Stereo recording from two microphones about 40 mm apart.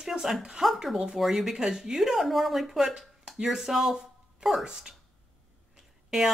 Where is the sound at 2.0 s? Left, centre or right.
Centre.